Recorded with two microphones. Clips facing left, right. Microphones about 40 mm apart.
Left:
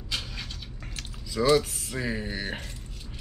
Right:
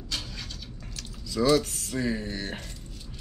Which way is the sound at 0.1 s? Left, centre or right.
Centre.